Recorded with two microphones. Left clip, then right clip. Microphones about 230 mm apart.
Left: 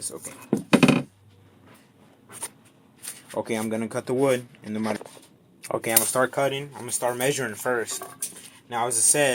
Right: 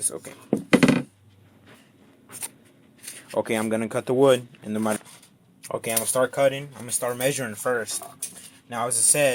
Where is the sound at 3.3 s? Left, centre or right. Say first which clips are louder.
Right 3 dB; right.